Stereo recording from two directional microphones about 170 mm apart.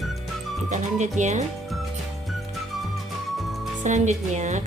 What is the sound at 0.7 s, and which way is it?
Speech, 45° right (ahead or behind).